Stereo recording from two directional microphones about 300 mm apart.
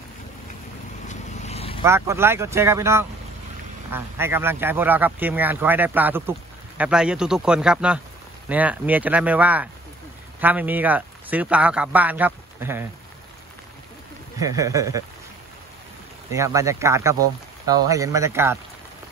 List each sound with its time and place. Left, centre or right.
1.0 s vehicle: left
1.8 s speech: centre
14.4 s speech: centre
16.3 s speech: centre